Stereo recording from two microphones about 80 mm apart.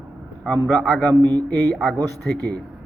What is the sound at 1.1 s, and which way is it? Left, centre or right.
Speech, right.